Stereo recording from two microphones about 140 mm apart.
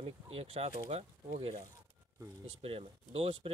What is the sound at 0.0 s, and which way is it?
Speech, 45° right (ahead or behind).